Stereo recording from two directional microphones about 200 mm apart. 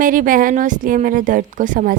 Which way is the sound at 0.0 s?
40° right (ahead or behind).